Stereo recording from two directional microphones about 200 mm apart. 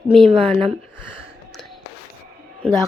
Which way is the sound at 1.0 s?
5° right (ahead or behind).